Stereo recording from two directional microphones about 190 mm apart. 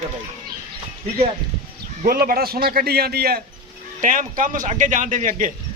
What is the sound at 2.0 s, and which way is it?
Speech, 50° right (ahead or behind).